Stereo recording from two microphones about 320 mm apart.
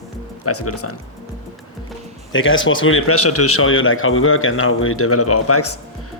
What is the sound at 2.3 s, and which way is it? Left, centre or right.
Speech, left.